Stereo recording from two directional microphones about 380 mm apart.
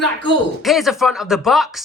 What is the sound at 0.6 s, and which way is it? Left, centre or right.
A woman's voice, centre.